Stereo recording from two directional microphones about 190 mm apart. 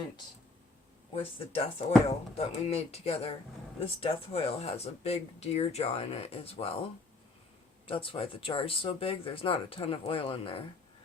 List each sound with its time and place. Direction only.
1.1 s speech: 30° left (ahead or behind)
7.9 s speech: 30° left (ahead or behind)